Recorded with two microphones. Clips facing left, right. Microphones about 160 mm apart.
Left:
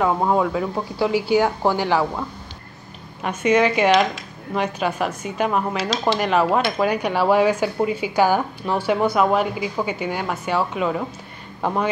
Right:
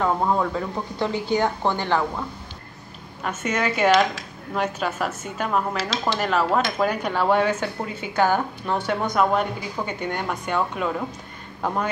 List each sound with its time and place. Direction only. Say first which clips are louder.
0.0 s speech: left 3 dB; 10° left (ahead or behind)
3.3 s speech: left 7 dB; 10° left (ahead or behind)